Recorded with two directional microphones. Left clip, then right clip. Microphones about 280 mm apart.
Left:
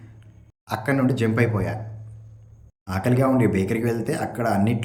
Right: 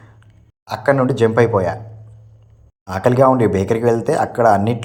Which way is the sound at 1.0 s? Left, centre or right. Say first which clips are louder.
Right 6 dB; centre.